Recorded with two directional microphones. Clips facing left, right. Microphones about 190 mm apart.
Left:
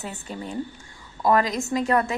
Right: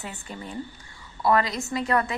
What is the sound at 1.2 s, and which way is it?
Speech, 15° left (ahead or behind).